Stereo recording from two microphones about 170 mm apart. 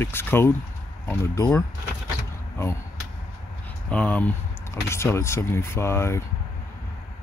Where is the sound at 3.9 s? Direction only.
10° left (ahead or behind).